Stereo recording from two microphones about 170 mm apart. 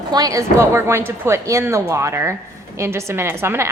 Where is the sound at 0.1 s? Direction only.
20° right (ahead or behind).